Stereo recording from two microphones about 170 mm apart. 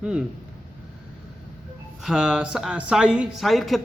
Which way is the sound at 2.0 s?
5° right (ahead or behind).